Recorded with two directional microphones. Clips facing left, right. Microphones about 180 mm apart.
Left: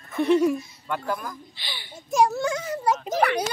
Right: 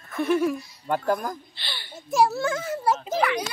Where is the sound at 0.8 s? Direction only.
40° right (ahead or behind).